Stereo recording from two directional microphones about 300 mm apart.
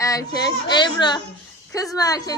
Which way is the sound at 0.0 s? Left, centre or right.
Centre.